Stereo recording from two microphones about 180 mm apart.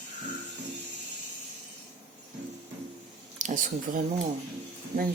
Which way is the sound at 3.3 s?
45° right (ahead or behind).